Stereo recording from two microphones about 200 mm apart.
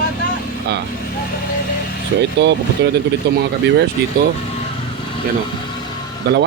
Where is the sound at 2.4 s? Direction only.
60° right (ahead or behind).